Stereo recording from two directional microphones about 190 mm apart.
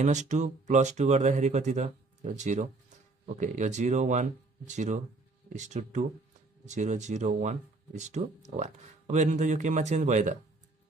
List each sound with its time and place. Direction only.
0.0 s speech: 40° right (ahead or behind)